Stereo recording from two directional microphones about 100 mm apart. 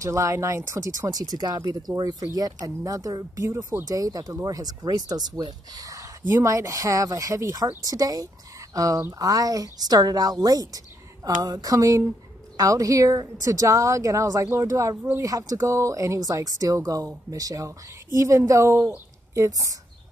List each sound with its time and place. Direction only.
0.0 s speech: 30° right (ahead or behind)